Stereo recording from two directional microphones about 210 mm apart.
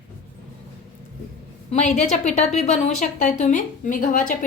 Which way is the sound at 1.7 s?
35° left (ahead or behind).